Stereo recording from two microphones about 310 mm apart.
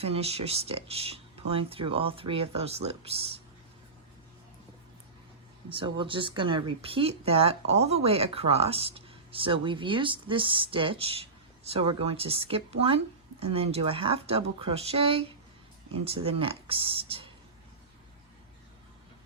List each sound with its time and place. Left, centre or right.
0.0 s speech: centre
5.6 s speech: centre